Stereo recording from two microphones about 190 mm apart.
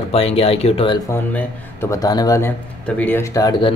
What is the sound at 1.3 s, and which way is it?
Speech, 15° left (ahead or behind).